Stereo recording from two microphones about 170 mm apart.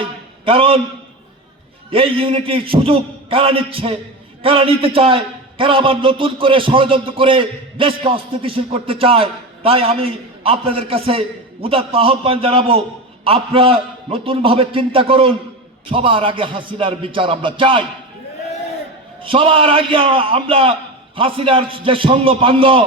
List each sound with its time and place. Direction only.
0.0 s a sound: 30° right (ahead or behind)
1.9 s a man's voice: 35° right (ahead or behind)
19.2 s a man's voice: 30° right (ahead or behind)